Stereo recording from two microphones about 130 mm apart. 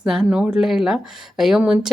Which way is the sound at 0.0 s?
5° right (ahead or behind).